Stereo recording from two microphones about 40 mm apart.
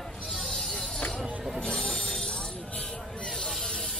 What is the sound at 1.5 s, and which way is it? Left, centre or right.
Train wheels squealing, centre.